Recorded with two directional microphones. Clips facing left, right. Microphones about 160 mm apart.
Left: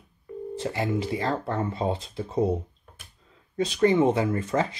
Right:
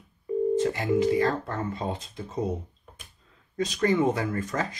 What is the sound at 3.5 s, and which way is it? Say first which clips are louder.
Speech: left 3 dB; 25° left (ahead or behind).